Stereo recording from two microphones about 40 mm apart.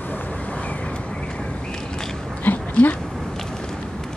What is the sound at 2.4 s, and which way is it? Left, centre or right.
Dog, left.